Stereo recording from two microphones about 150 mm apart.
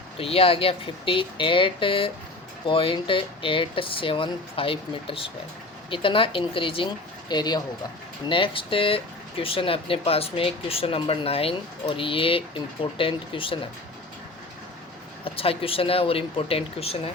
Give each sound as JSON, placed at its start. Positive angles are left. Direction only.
{"t": 0.2, "sound": "speech", "side_deg": 40}
{"t": 15.2, "sound": "speech", "side_deg": 40}